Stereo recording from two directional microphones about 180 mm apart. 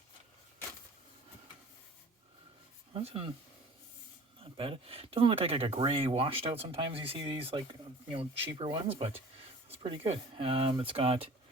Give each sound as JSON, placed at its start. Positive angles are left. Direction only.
{"t": 2.9, "sound": "speech", "side_deg": -30}
{"t": 4.4, "sound": "speech", "side_deg": -30}